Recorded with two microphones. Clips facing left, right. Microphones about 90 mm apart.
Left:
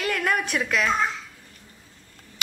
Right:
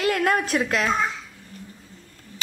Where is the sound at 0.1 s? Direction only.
30° right (ahead or behind).